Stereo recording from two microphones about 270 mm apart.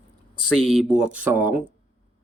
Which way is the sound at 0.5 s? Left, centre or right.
Centre.